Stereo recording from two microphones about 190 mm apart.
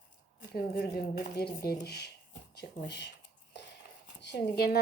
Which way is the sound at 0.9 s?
55° left (ahead or behind).